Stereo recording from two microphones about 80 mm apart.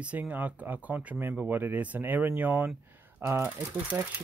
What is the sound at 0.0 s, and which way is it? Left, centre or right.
Speech, centre.